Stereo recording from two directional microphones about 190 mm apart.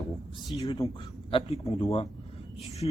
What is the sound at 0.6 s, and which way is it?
Speech, 15° left (ahead or behind).